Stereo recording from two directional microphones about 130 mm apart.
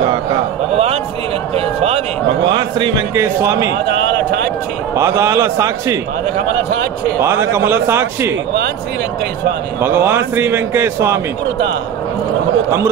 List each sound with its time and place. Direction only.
1.5 s a sound: 50° right (ahead or behind)
3.2 s a man's voice: 20° right (ahead or behind)
4.9 s a man's voice: 20° right (ahead or behind)
7.2 s a man's voice: 20° right (ahead or behind)
9.8 s speech: 15° right (ahead or behind)